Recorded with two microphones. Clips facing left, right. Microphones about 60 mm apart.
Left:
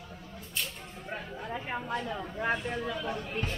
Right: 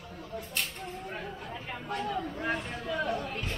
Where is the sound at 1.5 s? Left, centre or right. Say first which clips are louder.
Left 4 dB; left.